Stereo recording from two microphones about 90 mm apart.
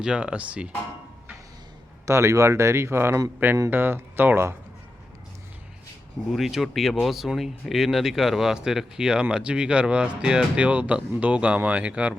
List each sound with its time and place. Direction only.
0.0 s speech: 10° right (ahead or behind)
2.0 s speech: 35° right (ahead or behind)
6.3 s speech: centre (ahead or behind)